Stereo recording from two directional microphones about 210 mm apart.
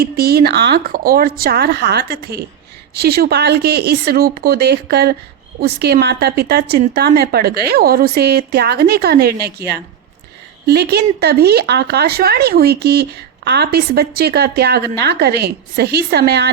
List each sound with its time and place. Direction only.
0.0 s speech: 45° right (ahead or behind)
10.7 s speech: 50° right (ahead or behind)